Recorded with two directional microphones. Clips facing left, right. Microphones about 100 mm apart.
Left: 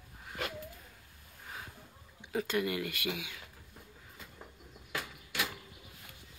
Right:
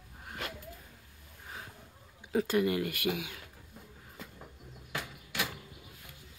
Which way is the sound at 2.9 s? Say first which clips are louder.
Right 4 dB; 45° right (ahead or behind).